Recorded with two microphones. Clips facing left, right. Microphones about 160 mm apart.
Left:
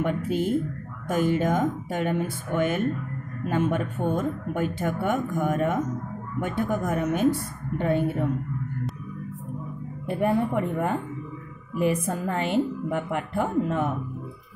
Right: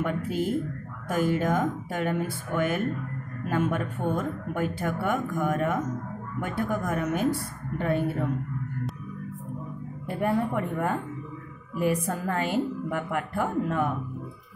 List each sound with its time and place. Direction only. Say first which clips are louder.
0.0 s speech: left 2 dB; 20° left (ahead or behind)
10.0 s speech: left 3 dB; 20° left (ahead or behind)